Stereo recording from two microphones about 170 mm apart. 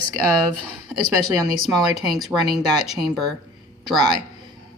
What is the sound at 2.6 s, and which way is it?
Speech, 25° right (ahead or behind).